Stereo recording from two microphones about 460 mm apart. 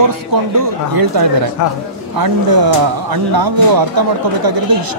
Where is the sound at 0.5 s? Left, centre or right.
Right.